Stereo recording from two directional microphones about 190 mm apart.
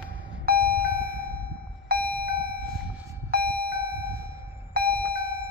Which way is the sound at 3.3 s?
55° right (ahead or behind).